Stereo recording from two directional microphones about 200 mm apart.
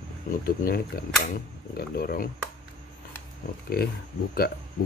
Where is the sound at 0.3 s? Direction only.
45° left (ahead or behind).